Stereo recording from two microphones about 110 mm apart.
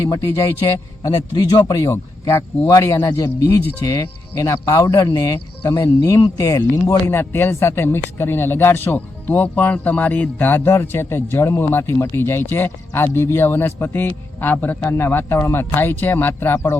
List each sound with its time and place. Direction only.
0.1 s a man's voice: 30° left (ahead or behind)
1.9 s a man's voice: 25° left (ahead or behind)
3.2 s a man's voice: 20° left (ahead or behind)